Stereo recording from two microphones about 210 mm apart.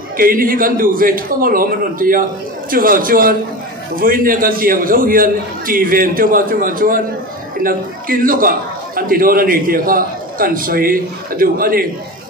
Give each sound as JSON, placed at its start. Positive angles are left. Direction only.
{"t": 0.2, "sound": "a man's voice", "side_deg": -40}